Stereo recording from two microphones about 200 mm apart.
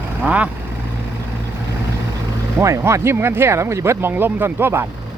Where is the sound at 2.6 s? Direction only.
15° right (ahead or behind).